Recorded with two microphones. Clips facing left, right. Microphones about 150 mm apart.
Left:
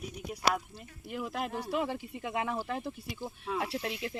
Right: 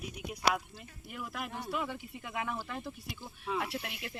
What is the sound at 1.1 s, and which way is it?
Speech, 30° left (ahead or behind).